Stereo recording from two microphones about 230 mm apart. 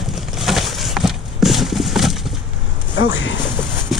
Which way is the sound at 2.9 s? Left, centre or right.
Left.